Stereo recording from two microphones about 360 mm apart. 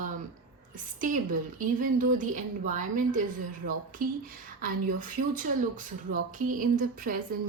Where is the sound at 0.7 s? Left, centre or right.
Right.